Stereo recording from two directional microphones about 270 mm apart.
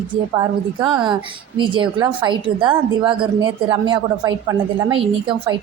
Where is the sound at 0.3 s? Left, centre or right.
Centre.